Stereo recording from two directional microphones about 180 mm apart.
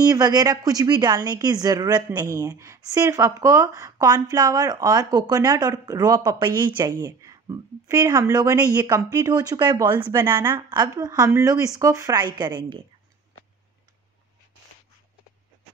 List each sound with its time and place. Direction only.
0.1 s speech: 20° right (ahead or behind)